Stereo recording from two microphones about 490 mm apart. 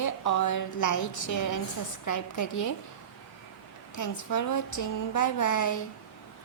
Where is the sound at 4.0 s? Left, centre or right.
Left.